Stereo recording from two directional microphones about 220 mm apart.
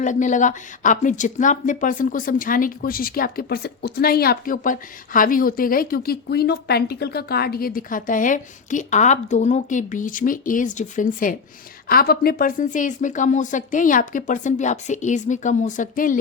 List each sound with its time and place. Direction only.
0.0 s speech: 35° left (ahead or behind)